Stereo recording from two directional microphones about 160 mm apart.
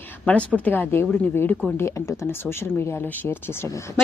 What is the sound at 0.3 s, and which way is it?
Speech, 10° left (ahead or behind).